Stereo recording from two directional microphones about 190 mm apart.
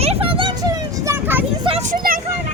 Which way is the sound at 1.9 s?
45° right (ahead or behind).